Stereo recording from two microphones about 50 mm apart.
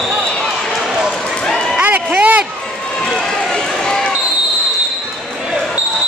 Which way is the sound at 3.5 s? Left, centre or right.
Centre.